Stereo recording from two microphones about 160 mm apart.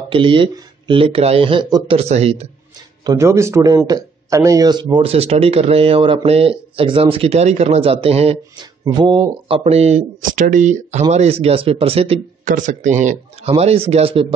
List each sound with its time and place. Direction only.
0.1 s speech: 30° right (ahead or behind)
3.1 s speech: 15° right (ahead or behind); by 8.6 s 40° right (ahead or behind)
8.8 s speech: 30° right (ahead or behind)
9.5 s speech: 40° right (ahead or behind)
12.4 s speech: 50° right (ahead or behind)
13.5 s speech: 40° right (ahead or behind)